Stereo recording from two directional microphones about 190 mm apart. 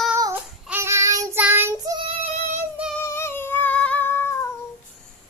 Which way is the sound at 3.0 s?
15° left (ahead or behind).